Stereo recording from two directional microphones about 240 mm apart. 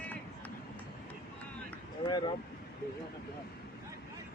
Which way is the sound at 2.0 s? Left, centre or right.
Centre.